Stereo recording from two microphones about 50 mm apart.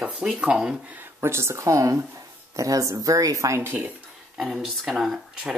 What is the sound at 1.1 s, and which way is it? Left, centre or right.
Speech, right.